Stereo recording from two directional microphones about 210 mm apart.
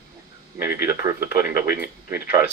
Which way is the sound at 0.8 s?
15° right (ahead or behind).